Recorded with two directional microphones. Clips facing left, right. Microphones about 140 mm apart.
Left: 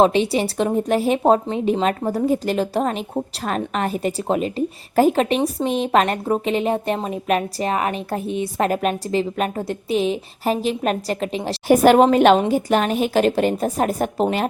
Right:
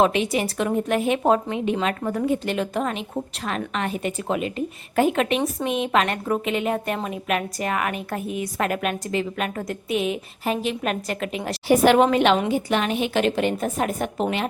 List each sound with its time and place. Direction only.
0.0 s a woman's voice: 30° left (ahead or behind)
11.7 s a woman's voice: 45° left (ahead or behind)